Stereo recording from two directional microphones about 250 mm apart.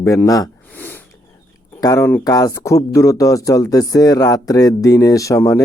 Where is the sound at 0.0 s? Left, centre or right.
Centre.